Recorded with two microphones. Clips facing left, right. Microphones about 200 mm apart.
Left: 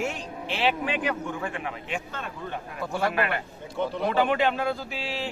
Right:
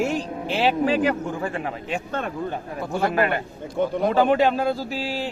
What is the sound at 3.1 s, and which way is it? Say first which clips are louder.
Speech: right 5 dB; 35° right (ahead or behind).